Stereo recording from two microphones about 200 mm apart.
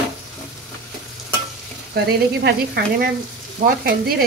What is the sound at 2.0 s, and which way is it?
Speech, 50° right (ahead or behind).